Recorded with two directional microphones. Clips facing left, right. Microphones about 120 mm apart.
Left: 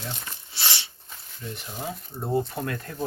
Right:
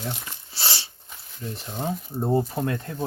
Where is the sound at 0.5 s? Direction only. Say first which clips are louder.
Right 1 dB; 40° right (ahead or behind).